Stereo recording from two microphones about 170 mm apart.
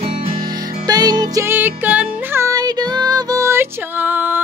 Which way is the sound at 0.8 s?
25° right (ahead or behind).